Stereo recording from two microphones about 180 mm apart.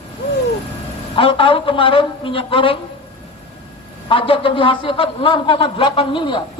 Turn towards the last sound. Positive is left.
turn(degrees=30)  # may be behind; listen again after turning